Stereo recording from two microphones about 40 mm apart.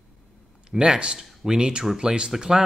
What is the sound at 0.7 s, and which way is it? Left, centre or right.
Speech, right.